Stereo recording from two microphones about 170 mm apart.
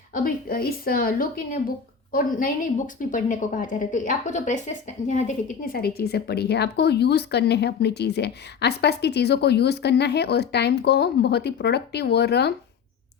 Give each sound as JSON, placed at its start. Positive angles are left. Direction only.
{"t": 0.1, "sound": "a woman's voice", "side_deg": 55}
{"t": 5.7, "sound": "speech", "side_deg": 65}